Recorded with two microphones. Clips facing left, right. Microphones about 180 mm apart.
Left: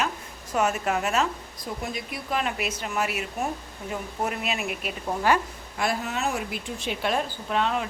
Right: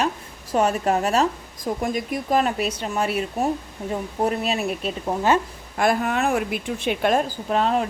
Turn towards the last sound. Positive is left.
turn(degrees=-40)  # may be behind; listen again after turning